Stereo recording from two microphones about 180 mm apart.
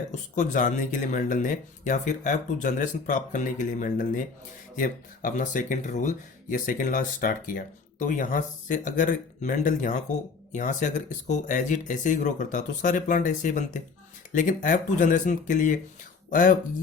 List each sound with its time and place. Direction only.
0.1 s speech: 45° left (ahead or behind)